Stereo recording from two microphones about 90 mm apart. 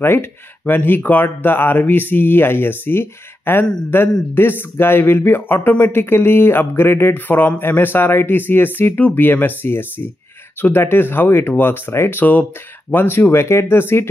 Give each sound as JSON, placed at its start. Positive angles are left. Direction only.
{"t": 0.0, "sound": "speech", "side_deg": 25}